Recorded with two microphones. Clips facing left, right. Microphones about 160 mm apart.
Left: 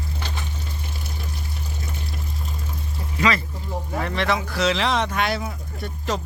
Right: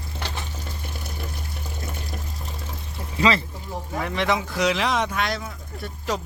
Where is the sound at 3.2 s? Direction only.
30° right (ahead or behind).